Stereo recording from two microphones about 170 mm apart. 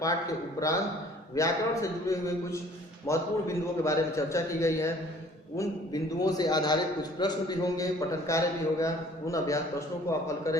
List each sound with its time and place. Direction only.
1.4 s a man's voice: 20° left (ahead or behind)